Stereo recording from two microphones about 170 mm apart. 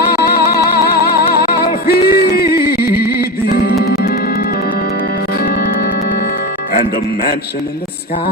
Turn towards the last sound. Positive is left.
turn(degrees=65)  # may be behind; listen again after turning